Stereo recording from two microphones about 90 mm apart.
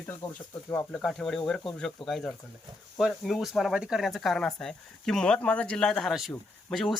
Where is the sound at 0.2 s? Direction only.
20° left (ahead or behind).